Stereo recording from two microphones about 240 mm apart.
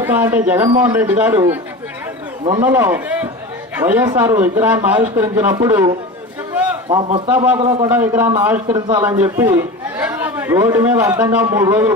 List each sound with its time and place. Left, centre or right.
0.0 s speech: centre
2.6 s speech: centre
6.9 s a man's voice: centre
7.2 s a man's voice: centre